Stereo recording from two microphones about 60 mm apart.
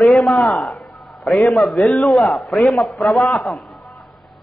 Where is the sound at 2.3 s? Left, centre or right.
Centre.